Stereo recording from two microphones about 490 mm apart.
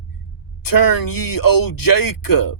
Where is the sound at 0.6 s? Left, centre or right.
Left.